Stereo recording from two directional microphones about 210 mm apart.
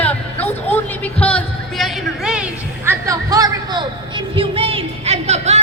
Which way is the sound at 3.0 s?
15° right (ahead or behind).